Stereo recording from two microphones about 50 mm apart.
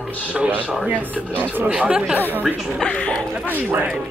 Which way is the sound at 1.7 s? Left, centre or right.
Right.